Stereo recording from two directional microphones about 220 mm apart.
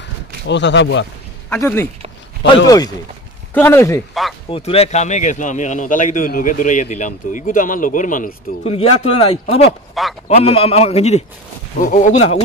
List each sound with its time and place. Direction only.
0.5 s speech: 55° left (ahead or behind)
1.5 s speech: 10° left (ahead or behind)
4.1 s speech: centre (ahead or behind)
4.5 s a man's voice: 25° left (ahead or behind)